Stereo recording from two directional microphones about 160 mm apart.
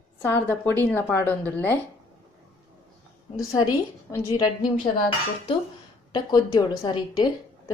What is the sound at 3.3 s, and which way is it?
A woman's voice, 25° left (ahead or behind).